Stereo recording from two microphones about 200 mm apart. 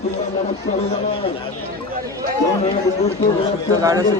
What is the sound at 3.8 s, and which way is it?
Speech, 15° right (ahead or behind).